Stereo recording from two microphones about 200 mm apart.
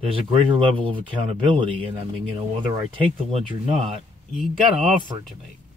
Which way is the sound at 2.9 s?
30° right (ahead or behind).